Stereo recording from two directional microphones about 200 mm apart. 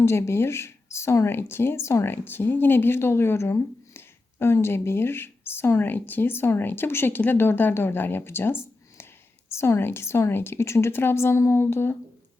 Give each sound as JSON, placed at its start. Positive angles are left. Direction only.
{"t": 0.0, "sound": "speech", "side_deg": 15}